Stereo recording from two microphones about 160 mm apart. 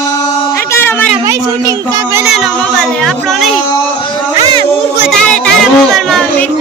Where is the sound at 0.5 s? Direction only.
15° left (ahead or behind).